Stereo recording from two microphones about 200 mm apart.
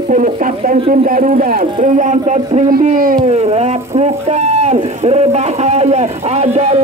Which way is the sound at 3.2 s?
30° right (ahead or behind).